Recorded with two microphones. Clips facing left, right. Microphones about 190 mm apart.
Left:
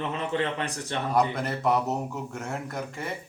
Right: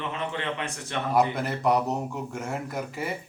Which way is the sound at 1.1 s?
5° right (ahead or behind).